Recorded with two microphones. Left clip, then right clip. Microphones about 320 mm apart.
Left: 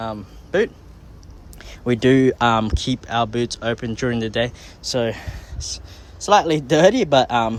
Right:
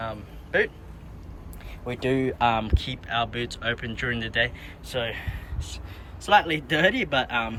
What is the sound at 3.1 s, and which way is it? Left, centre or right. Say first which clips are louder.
Speech: left 6 dB; centre.